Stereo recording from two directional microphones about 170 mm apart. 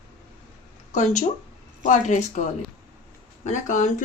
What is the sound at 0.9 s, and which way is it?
Speech, 45° left (ahead or behind).